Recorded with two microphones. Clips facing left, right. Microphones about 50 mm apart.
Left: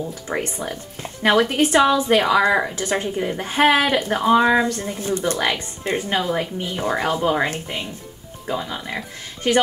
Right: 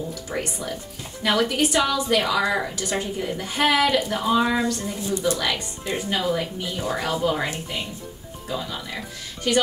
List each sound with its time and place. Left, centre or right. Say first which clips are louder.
0.1 s a woman's voice: left 3 dB; left